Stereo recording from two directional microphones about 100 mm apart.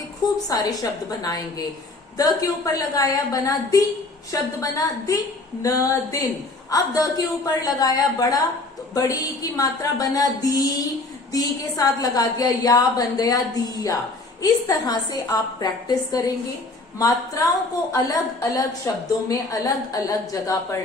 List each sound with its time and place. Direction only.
0.4 s a woman's voice: 40° left (ahead or behind)
17.9 s a woman's voice: 35° left (ahead or behind)